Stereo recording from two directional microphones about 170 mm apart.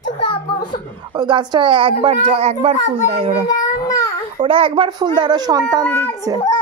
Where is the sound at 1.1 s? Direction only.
25° right (ahead or behind).